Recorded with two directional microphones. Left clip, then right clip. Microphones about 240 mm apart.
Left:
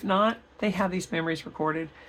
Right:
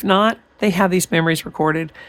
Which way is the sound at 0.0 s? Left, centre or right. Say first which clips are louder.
Right 8 dB; right.